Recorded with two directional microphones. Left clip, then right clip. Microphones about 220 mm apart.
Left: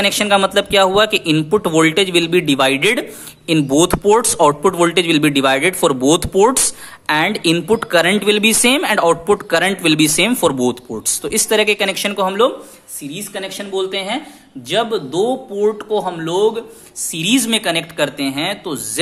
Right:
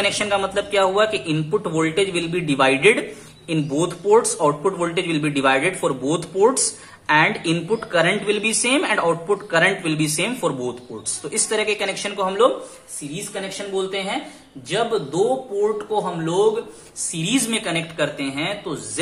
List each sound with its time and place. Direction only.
0.0 s a man's voice: 40° left (ahead or behind)